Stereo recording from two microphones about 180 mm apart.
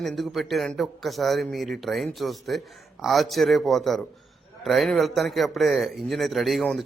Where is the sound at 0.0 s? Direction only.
Centre (ahead or behind).